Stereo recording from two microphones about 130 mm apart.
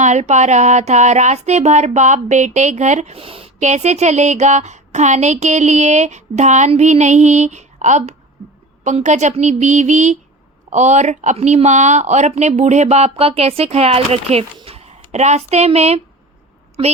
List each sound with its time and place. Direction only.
0.0 s speech: 65° right (ahead or behind)
3.2 s a woman's voice: 45° right (ahead or behind)